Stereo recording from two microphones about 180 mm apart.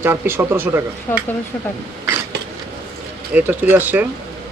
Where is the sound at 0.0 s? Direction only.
10° right (ahead or behind).